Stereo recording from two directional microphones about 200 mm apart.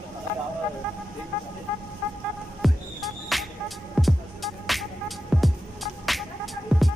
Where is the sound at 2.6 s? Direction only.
Centre (ahead or behind).